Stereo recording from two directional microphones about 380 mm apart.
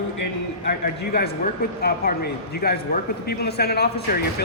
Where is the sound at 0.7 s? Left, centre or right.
Left.